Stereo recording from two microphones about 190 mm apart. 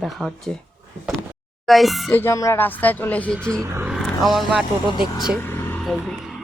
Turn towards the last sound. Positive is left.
turn(degrees=0)  # may be behind; listen again after turning